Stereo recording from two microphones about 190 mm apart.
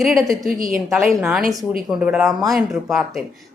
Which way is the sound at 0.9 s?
5° right (ahead or behind).